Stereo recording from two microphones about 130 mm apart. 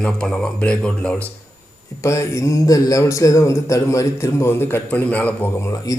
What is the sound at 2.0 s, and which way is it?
A man's voice, 20° left (ahead or behind).